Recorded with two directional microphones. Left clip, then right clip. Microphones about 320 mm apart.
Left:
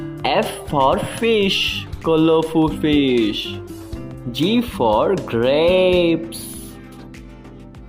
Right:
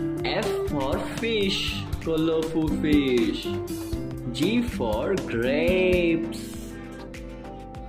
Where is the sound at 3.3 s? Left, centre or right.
Left.